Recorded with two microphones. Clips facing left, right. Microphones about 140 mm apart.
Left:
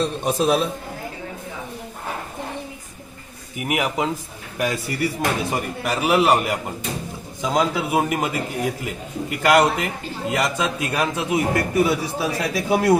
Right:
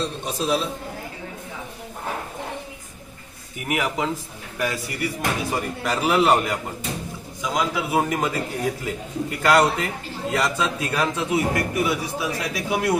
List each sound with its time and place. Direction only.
0.0 s a man's voice: 55° left (ahead or behind)
3.6 s a man's voice: 15° left (ahead or behind)
7.4 s a man's voice: 30° left (ahead or behind)
7.9 s a man's voice: 15° left (ahead or behind)
11.5 s speech: 30° left (ahead or behind)